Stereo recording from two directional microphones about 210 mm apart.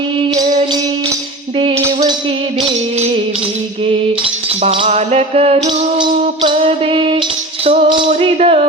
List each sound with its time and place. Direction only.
0.2 s music: 35° right (ahead or behind)
1.5 s a sound: 25° right (ahead or behind)
4.6 s music: 30° right (ahead or behind)